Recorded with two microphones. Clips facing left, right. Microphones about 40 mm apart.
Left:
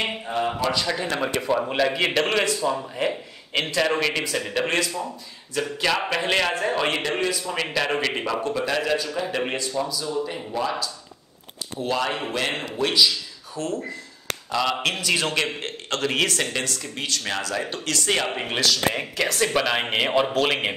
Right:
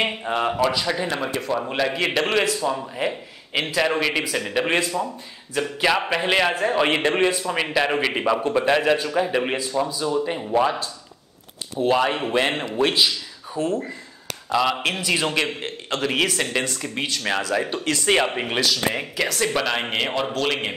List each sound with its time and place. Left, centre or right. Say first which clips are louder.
0.2 s a man's voice: right 2 dB; right
0.5 s speech: right 3 dB; centre
1.4 s a man's voice: left 3 dB; centre
4.7 s speech: right 3 dB; right
5.5 s speech: right 3 dB; centre
6.9 s a man's voice: right 5 dB; right
7.9 s speech: right 3 dB; centre
8.5 s speech: right 5 dB; right
9.4 s speech: right 2 dB; centre
9.7 s a man's voice: right 4 dB; right
11.9 s speech: right 5 dB; centre
13.6 s a man's voice: right 4 dB; centre
16.6 s speech: right 3 dB; right
18.4 s a man's voice: even; centre